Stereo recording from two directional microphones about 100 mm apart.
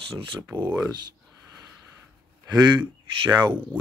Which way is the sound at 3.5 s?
15° right (ahead or behind).